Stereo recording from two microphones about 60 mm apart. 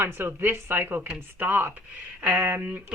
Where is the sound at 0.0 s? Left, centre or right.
Right.